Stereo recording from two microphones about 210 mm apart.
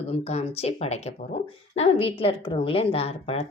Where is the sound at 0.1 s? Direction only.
30° left (ahead or behind).